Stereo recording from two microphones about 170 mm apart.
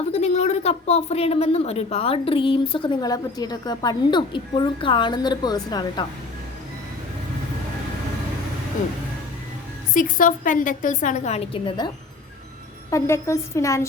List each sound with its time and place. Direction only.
0.1 s speech: 40° left (ahead or behind); by 6.1 s 25° left (ahead or behind)
9.9 s a woman's voice: 50° left (ahead or behind); by 11.9 s 30° left (ahead or behind)
12.9 s a woman's voice: 15° left (ahead or behind)